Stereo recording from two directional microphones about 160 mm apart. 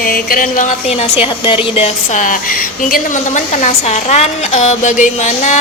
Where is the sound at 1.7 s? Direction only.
40° left (ahead or behind).